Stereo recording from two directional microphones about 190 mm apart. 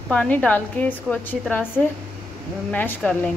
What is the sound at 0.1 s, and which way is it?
A woman's voice, 5° left (ahead or behind).